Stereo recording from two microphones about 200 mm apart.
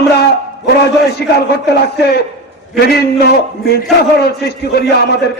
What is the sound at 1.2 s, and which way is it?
A man's voice, 55° left (ahead or behind).